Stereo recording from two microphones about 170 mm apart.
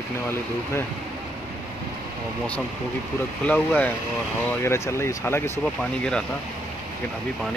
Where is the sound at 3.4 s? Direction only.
10° left (ahead or behind).